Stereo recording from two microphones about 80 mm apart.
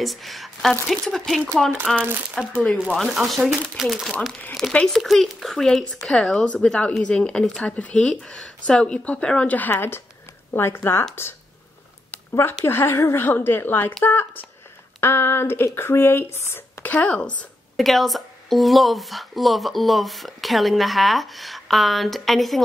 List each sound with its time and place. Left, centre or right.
0.0 s a woman's voice: centre
2.0 s speech: right
2.9 s a woman's voice: centre; by 11.1 s left
12.6 s a woman's voice: left
16.8 s speech: centre
17.7 s speech: centre